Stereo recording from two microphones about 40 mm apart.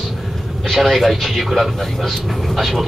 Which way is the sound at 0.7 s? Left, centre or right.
Centre.